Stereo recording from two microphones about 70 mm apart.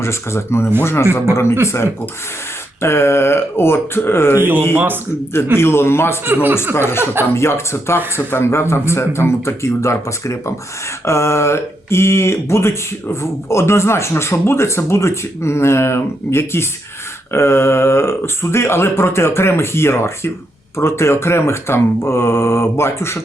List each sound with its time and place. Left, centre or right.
0.0 s speech: left
5.5 s speech: left
6.2 s speech: right
6.7 s speech: left